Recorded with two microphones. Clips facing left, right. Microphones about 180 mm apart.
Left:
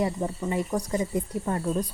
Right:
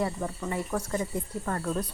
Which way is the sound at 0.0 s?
20° left (ahead or behind).